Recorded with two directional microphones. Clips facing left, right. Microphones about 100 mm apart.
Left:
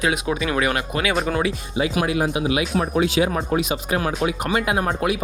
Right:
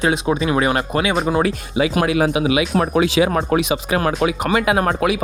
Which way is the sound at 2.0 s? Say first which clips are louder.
Right 4 dB; 90° right.